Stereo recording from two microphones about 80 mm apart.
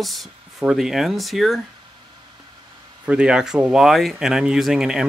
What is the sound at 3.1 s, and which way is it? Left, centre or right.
Speech, centre.